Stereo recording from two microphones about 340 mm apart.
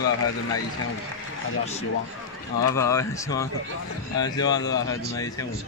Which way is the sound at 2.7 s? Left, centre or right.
Centre.